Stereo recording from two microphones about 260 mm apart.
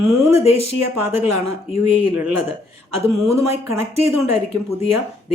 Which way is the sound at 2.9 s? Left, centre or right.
Right.